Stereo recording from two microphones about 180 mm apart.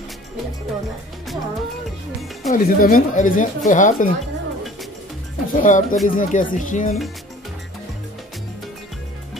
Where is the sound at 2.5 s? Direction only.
55° left (ahead or behind).